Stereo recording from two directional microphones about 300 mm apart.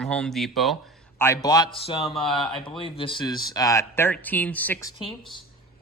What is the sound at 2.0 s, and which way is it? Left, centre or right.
Speech, centre.